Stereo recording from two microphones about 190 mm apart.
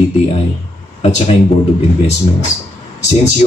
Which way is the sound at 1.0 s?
35° left (ahead or behind).